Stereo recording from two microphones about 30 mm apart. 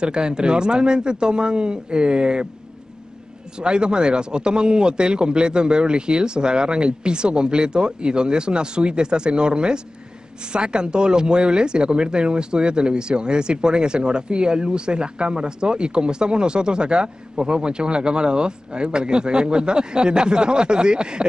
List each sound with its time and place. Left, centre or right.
0.0 s speech: right
3.5 s speech: right